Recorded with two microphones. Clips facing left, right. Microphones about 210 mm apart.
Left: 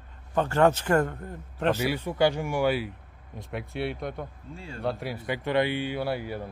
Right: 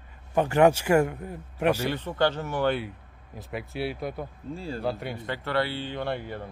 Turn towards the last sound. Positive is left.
turn(degrees=5)  # may be behind; listen again after turning